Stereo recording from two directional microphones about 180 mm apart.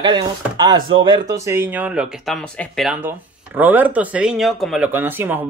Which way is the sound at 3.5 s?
10° right (ahead or behind).